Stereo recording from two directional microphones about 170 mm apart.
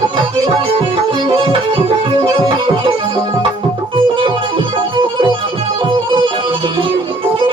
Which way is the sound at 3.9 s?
30° right (ahead or behind).